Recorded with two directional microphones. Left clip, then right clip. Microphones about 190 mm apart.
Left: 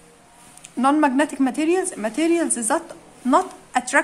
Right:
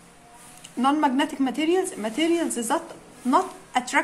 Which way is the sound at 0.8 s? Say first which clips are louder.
Left 4 dB; 20° left (ahead or behind).